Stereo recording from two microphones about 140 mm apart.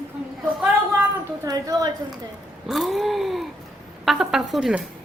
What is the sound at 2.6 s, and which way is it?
Speech, centre (ahead or behind).